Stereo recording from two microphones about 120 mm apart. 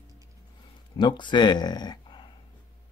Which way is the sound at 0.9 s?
40° left (ahead or behind).